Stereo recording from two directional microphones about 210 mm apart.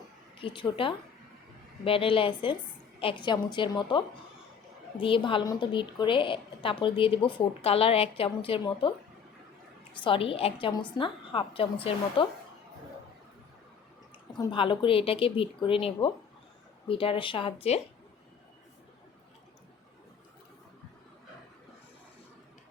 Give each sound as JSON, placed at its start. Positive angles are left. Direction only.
{"t": 0.3, "sound": "a woman's voice", "side_deg": 25}
{"t": 10.0, "sound": "a woman's voice", "side_deg": 25}
{"t": 14.3, "sound": "a woman's voice", "side_deg": 25}